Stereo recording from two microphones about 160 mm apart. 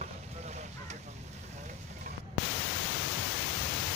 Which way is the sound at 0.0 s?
45° right (ahead or behind).